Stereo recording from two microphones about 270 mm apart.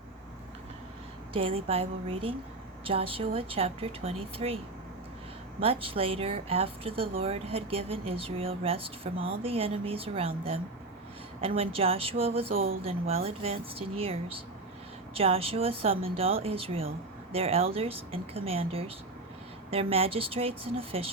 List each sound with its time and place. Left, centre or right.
1.4 s a woman's voice: right